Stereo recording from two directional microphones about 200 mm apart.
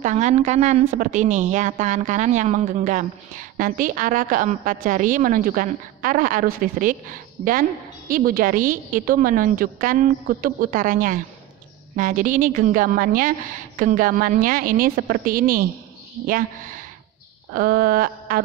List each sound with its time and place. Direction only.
0.0 s a woman's voice: 35° right (ahead or behind)